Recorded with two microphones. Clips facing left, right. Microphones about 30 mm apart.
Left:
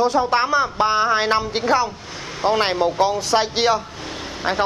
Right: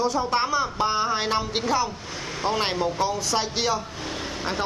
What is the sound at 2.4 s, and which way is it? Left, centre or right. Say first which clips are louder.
A man's voice: left 6 dB; centre.